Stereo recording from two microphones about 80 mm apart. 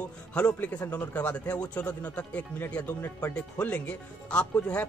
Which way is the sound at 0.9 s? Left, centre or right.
Centre.